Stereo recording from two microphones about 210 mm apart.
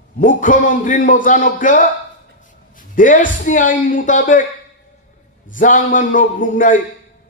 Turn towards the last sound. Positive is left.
turn(degrees=40)  # may be behind; listen again after turning